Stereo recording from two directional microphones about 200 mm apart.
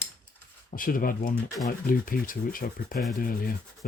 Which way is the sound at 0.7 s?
45° left (ahead or behind).